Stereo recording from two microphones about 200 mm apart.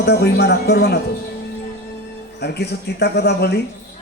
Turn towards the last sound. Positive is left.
turn(degrees=55)  # may be behind; listen again after turning